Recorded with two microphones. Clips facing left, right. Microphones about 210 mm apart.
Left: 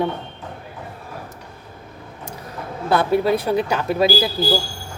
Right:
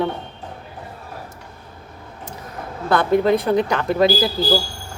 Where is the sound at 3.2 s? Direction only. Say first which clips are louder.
Right 2 dB; 10° left (ahead or behind).